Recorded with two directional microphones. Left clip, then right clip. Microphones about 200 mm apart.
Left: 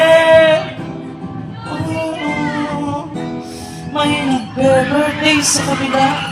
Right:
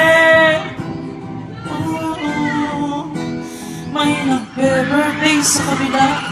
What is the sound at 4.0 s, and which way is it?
Music, 35° left (ahead or behind).